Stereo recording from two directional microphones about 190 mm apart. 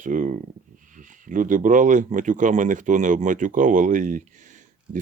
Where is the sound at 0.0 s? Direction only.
45° right (ahead or behind).